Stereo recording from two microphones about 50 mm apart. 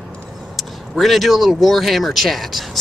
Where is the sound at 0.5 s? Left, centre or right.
Centre.